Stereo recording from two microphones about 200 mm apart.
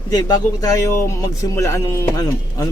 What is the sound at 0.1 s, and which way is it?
Speech, 20° left (ahead or behind).